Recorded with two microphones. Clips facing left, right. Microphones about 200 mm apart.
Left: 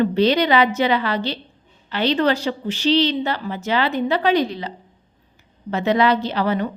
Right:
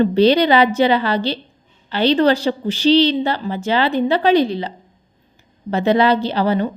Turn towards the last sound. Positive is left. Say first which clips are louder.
# right 3 dB
turn(degrees=-30)  # may be behind; listen again after turning